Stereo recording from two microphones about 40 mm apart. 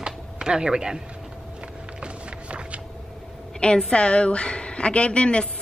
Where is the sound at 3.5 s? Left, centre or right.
Left.